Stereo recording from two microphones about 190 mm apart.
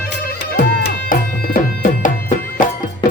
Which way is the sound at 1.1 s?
45° left (ahead or behind).